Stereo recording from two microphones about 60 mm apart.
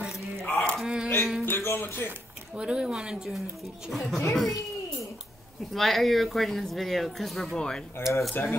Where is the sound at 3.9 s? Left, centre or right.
Centre.